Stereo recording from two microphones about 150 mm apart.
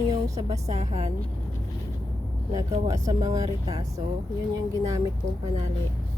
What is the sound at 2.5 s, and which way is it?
Speech, 25° right (ahead or behind).